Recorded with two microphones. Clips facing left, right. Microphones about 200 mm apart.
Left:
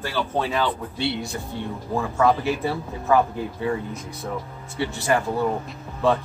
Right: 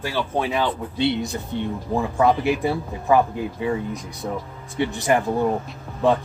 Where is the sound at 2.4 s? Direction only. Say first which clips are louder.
Right 3 dB; 15° right (ahead or behind).